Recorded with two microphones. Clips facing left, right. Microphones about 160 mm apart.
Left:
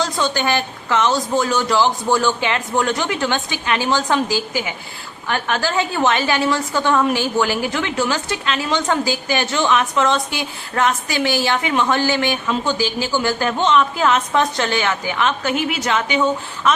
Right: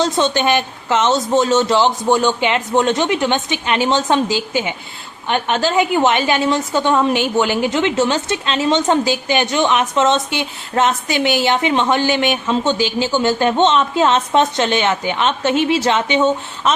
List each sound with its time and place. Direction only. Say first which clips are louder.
0.0 s a woman's voice: right 4 dB; 25° right (ahead or behind)